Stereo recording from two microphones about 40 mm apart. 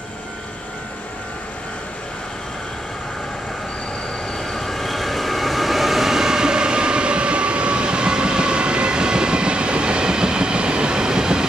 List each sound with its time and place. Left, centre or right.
4.5 s train: centre